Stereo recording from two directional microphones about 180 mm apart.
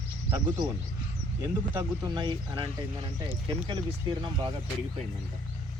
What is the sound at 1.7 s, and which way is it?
Speech, 20° right (ahead or behind).